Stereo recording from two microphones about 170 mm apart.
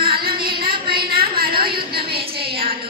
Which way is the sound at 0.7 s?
30° right (ahead or behind).